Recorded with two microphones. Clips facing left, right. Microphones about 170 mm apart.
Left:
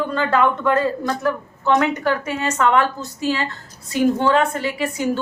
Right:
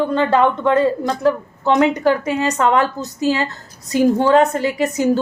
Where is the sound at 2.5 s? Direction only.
35° right (ahead or behind).